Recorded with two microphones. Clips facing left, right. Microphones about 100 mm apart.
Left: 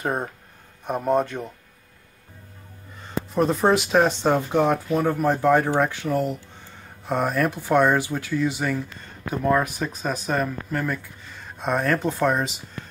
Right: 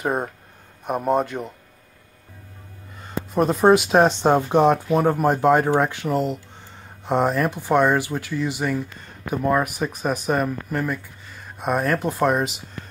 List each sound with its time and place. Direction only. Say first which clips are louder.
0.0 s speech: right 2 dB; 10° right (ahead or behind)
3.3 s speech: right 4 dB; 15° right (ahead or behind)